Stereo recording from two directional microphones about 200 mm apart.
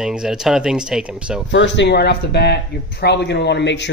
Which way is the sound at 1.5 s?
65° left (ahead or behind).